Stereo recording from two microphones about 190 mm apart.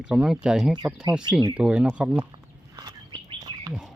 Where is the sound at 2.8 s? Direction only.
20° right (ahead or behind).